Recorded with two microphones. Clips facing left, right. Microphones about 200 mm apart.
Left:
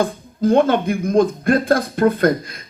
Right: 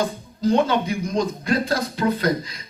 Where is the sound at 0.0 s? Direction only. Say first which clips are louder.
Left 4 dB; 55° left (ahead or behind).